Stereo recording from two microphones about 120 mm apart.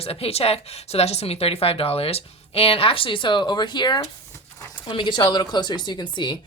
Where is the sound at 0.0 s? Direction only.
55° left (ahead or behind).